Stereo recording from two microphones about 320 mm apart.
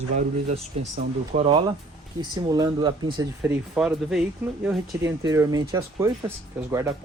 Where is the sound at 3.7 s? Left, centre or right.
Centre.